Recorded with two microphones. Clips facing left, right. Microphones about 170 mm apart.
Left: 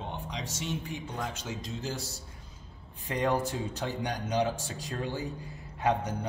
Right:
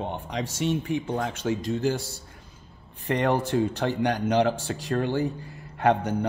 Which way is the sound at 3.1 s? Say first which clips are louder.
Right 5 dB; 70° right (ahead or behind).